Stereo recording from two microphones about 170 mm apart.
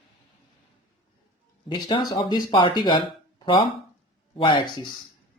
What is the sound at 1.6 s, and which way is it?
Speech, 25° left (ahead or behind).